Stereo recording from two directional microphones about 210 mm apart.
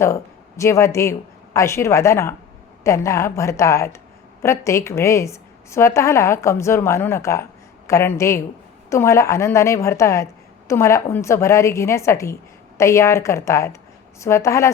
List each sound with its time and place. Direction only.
0.0 s a woman's voice: 15° left (ahead or behind)